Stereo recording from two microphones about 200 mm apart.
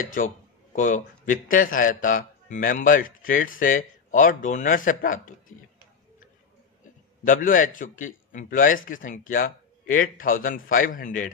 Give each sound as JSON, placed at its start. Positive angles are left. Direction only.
{"t": 0.0, "sound": "a man's voice", "side_deg": 45}
{"t": 7.2, "sound": "a man's voice", "side_deg": 45}